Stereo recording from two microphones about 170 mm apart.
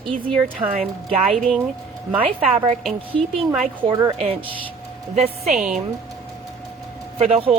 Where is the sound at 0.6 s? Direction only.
25° right (ahead or behind).